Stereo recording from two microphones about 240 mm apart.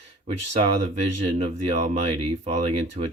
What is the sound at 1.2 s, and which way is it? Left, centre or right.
Speech, right.